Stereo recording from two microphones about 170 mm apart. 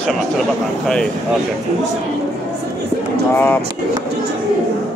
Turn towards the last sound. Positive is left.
turn(degrees=10)  # may be behind; listen again after turning